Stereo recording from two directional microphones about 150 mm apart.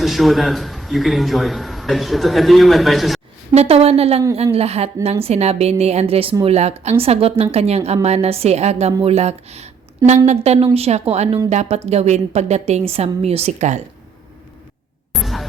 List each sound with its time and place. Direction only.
0.0 s a man's voice: centre (ahead or behind)
3.5 s a woman's voice: 45° right (ahead or behind)
15.1 s a sound: centre (ahead or behind)